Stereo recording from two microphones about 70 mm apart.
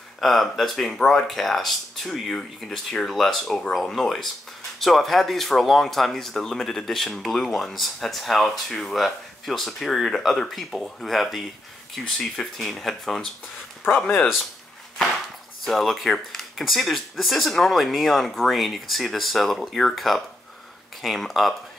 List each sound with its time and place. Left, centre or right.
0.2 s speech: centre
14.0 s speech: left
15.6 s speech: centre